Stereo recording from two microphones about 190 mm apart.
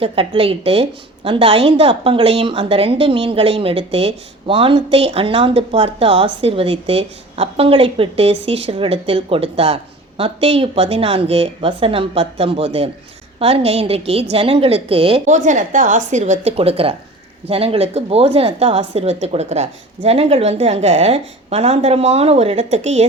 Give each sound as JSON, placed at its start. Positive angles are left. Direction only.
{"t": 0.0, "sound": "a woman's voice", "side_deg": -30}